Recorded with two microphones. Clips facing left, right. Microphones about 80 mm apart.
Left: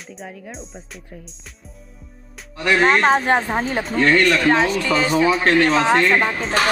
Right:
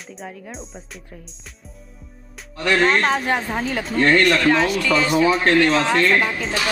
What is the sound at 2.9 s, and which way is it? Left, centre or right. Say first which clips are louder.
Speech: left 3 dB; left.